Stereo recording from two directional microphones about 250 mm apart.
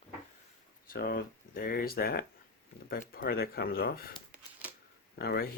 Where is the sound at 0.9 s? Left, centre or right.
Left.